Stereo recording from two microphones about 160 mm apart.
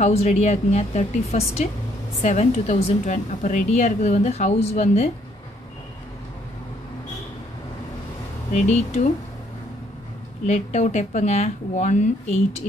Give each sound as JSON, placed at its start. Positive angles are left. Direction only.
{"t": 0.0, "sound": "a woman's voice", "side_deg": 45}
{"t": 8.5, "sound": "a woman's voice", "side_deg": 45}
{"t": 10.4, "sound": "a woman's voice", "side_deg": 45}